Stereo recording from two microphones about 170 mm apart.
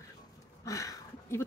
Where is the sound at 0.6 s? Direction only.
20° left (ahead or behind).